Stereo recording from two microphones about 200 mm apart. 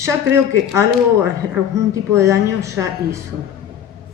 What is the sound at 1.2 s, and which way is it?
A woman's voice, 10° right (ahead or behind).